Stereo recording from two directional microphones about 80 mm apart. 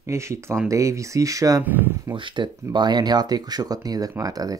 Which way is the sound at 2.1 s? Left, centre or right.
Right.